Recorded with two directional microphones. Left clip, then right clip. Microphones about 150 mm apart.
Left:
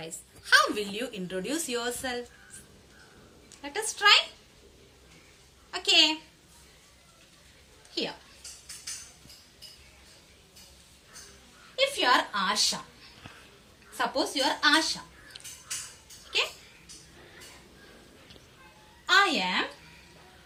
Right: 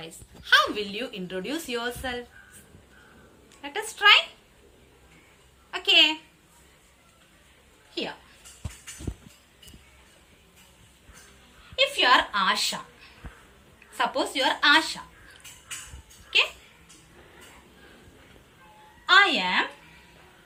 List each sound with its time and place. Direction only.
0.0 s a woman's voice: 10° left (ahead or behind)
3.6 s a woman's voice: 10° left (ahead or behind)
5.7 s a woman's voice: 5° left (ahead or behind)
11.8 s a woman's voice: 25° left (ahead or behind)
13.9 s speech: 30° left (ahead or behind)
19.0 s a woman's voice: 25° left (ahead or behind)